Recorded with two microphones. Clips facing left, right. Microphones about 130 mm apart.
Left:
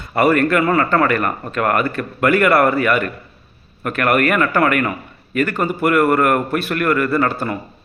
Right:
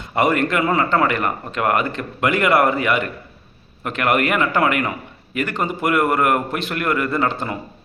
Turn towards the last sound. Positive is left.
turn(degrees=-20)  # may be behind; listen again after turning